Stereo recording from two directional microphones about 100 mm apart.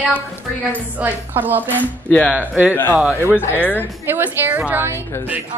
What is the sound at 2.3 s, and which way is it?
Speech, 15° right (ahead or behind).